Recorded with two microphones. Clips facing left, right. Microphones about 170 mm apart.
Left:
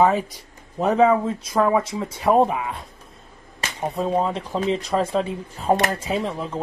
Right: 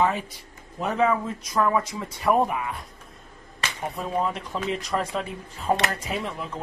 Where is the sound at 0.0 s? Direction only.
40° left (ahead or behind).